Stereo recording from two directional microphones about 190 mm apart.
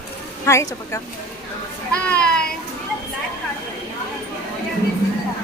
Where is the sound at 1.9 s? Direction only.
5° left (ahead or behind).